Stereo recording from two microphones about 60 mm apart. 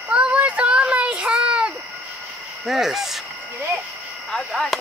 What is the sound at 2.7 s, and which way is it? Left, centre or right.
Speech, centre.